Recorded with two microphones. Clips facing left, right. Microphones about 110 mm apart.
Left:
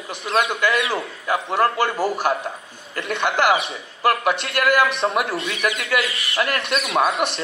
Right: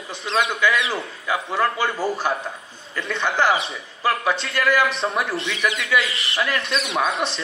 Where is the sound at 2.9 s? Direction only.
60° left (ahead or behind).